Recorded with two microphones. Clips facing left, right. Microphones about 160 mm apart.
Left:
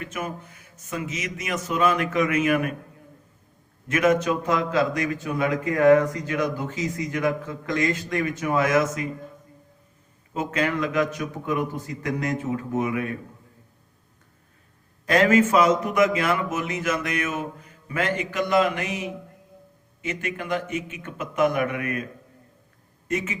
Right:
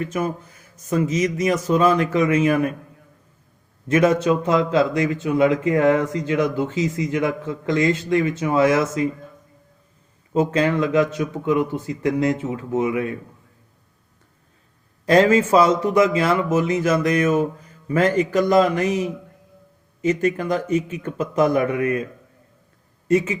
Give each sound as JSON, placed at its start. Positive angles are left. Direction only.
{"t": 0.0, "sound": "a man's voice", "side_deg": -35}
{"t": 3.8, "sound": "speech", "side_deg": -30}
{"t": 10.3, "sound": "speech", "side_deg": -30}
{"t": 15.0, "sound": "a man's voice", "side_deg": -30}
{"t": 23.0, "sound": "a man's voice", "side_deg": -30}